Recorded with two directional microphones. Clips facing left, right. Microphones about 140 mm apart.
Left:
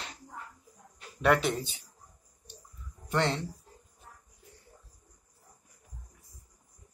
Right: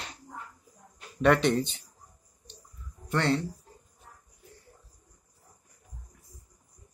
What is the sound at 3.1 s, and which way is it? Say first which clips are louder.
Speech: right 2 dB; 15° left (ahead or behind).